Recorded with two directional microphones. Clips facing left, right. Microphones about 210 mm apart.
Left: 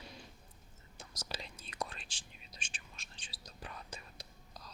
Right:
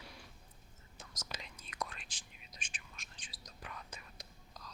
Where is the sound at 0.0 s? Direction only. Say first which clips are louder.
Left 3 dB; 20° left (ahead or behind).